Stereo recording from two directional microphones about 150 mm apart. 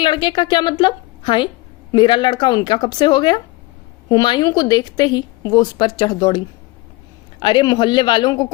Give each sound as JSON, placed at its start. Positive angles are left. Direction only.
{"t": 0.0, "sound": "a woman's voice", "side_deg": 30}